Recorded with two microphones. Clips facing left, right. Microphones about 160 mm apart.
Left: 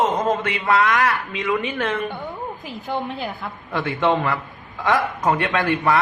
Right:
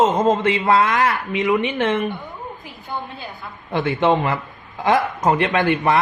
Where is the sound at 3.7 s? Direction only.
20° right (ahead or behind).